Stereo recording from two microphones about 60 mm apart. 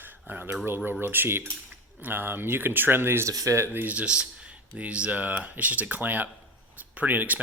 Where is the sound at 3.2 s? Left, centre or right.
Right.